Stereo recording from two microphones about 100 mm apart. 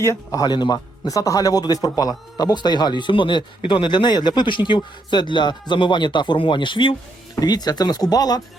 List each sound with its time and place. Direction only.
0.0 s a man's voice: 30° left (ahead or behind); by 6.9 s 55° left (ahead or behind)
7.3 s speech: 40° left (ahead or behind)